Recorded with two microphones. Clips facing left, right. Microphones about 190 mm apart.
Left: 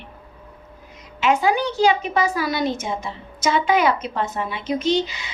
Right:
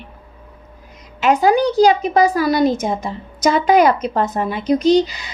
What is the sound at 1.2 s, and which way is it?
A woman's voice, 40° right (ahead or behind).